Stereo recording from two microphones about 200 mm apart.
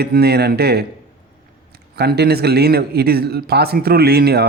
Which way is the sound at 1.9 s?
55° right (ahead or behind).